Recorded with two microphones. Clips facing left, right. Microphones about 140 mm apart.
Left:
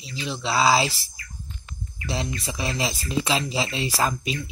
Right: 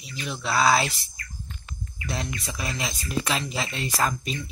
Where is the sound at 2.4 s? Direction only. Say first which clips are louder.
Left 4 dB; 30° left (ahead or behind).